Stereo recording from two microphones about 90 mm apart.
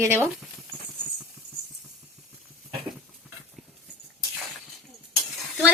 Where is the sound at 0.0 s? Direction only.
25° right (ahead or behind).